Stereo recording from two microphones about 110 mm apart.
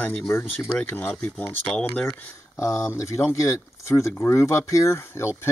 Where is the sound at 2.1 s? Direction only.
25° left (ahead or behind).